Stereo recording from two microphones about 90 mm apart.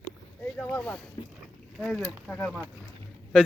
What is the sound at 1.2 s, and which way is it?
Boat, 55° left (ahead or behind).